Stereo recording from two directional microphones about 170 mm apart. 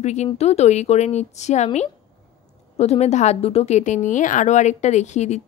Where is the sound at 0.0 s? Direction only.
40° left (ahead or behind).